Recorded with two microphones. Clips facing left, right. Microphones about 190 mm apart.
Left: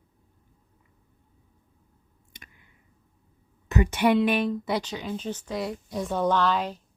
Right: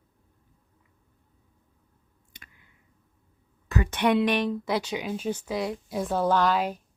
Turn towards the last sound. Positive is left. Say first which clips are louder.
# right 1 dB
turn(degrees=-10)  # may be behind; listen again after turning